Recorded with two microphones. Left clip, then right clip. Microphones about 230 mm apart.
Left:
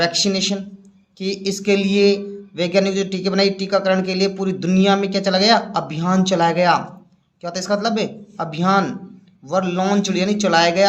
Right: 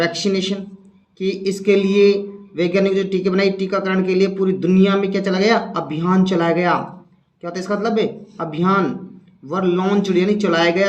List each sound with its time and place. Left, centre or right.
0.0 s a man's voice: left